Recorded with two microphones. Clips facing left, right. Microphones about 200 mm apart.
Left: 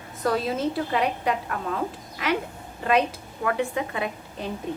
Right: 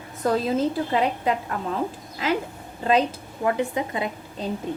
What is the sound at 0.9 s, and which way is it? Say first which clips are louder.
Speech: right 2 dB; 25° right (ahead or behind).